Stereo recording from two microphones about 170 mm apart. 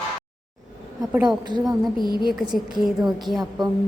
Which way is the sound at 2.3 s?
Centre (ahead or behind).